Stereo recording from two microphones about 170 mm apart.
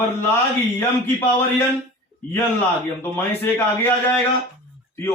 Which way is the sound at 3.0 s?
10° left (ahead or behind).